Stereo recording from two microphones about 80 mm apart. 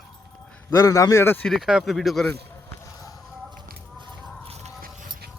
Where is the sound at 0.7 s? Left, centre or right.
Left.